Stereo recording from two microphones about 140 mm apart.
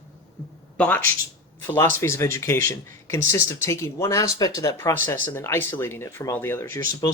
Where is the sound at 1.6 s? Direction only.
15° left (ahead or behind).